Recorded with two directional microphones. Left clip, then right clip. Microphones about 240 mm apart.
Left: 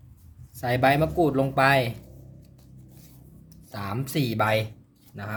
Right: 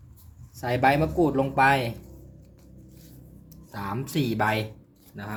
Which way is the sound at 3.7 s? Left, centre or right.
Left.